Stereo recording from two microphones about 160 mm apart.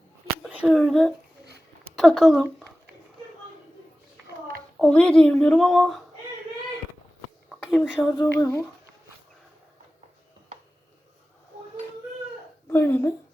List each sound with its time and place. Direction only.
0.4 s speech: 5° right (ahead or behind)
4.8 s a woman's voice: 5° left (ahead or behind)
7.8 s a woman's voice: 10° left (ahead or behind)
12.7 s a woman's voice: 15° left (ahead or behind)